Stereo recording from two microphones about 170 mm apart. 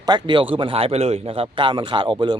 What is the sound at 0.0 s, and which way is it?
A man's voice, 25° right (ahead or behind).